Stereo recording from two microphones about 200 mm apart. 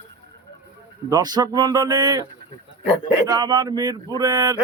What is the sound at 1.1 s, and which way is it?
Speech, 20° right (ahead or behind).